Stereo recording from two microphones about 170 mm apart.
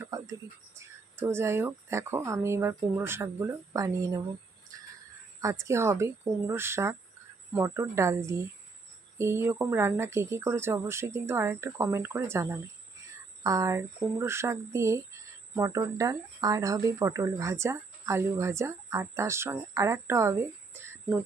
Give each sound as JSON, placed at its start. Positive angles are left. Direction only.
{"t": 0.0, "sound": "a sound", "side_deg": -20}
{"t": 0.8, "sound": "speech", "side_deg": -15}
{"t": 5.4, "sound": "speech", "side_deg": -15}